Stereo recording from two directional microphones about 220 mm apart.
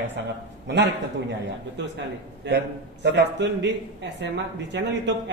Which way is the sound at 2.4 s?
50° right (ahead or behind).